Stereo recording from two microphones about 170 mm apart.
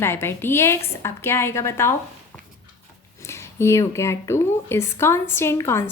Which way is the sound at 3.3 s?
15° left (ahead or behind).